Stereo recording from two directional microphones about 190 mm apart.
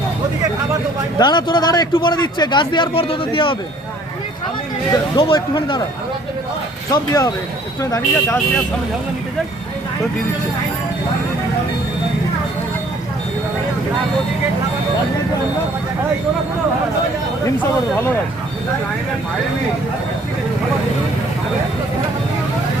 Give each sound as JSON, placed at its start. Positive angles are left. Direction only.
{"t": 1.2, "sound": "a man's voice", "side_deg": 25}
{"t": 5.1, "sound": "a man's voice", "side_deg": 25}
{"t": 6.9, "sound": "a man's voice", "side_deg": 20}